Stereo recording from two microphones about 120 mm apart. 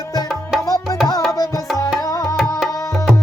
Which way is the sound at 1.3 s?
30° left (ahead or behind).